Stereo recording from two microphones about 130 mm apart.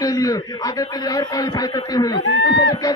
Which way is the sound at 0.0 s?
25° left (ahead or behind).